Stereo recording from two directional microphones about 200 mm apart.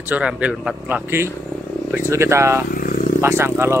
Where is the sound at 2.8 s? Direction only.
40° left (ahead or behind).